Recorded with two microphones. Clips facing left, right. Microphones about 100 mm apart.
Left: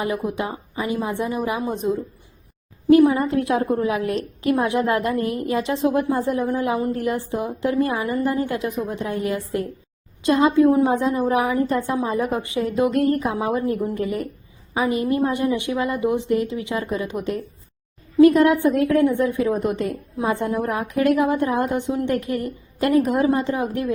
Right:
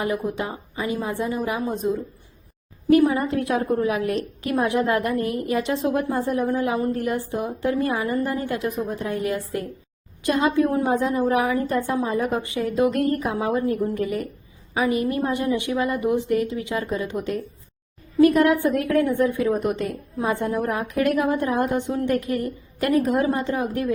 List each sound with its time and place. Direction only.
0.0 s a woman's voice: 20° left (ahead or behind)